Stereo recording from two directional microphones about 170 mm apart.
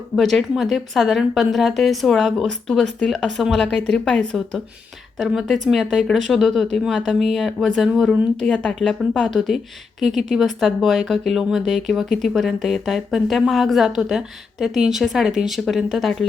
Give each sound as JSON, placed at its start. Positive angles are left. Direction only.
{"t": 0.2, "sound": "speech", "side_deg": 0}